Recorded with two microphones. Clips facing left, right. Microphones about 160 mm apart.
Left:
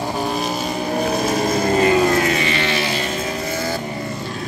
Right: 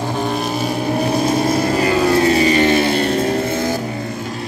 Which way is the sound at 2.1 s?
35° right (ahead or behind).